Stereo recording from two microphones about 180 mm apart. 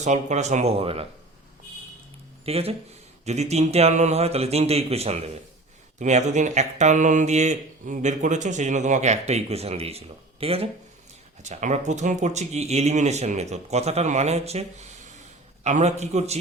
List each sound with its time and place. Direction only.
0.0 s speech: 40° right (ahead or behind)
2.4 s speech: 35° right (ahead or behind)